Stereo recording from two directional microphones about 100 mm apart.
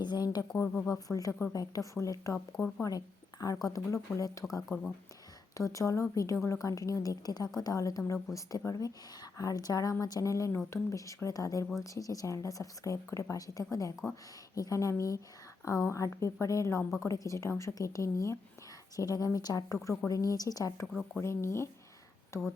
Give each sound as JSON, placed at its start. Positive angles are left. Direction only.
{"t": 0.0, "sound": "speech", "side_deg": 45}
{"t": 0.5, "sound": "speech", "side_deg": 20}
{"t": 0.9, "sound": "a woman's voice", "side_deg": 35}
{"t": 19.6, "sound": "a woman's voice", "side_deg": 25}
{"t": 20.8, "sound": "speech", "side_deg": 0}
{"t": 21.2, "sound": "speech", "side_deg": 25}